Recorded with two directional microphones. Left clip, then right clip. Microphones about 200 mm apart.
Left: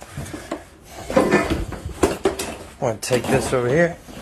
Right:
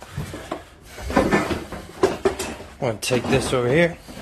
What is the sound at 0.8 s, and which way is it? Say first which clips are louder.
Dishes: left 2 dB; centre (ahead or behind).